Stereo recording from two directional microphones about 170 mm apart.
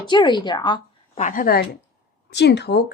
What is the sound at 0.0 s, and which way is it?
A woman's voice, 25° left (ahead or behind).